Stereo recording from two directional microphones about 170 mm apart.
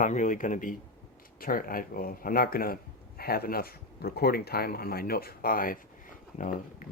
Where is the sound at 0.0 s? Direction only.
45° left (ahead or behind).